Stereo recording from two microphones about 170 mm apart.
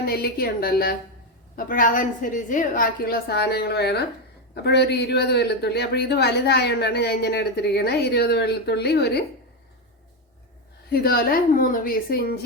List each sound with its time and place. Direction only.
0.0 s a woman's voice: 65° left (ahead or behind)
10.8 s a woman's voice: 65° left (ahead or behind)